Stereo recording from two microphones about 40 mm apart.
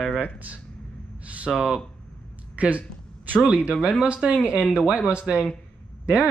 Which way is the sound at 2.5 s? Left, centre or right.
Right.